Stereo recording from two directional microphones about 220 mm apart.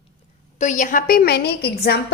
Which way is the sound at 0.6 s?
35° left (ahead or behind).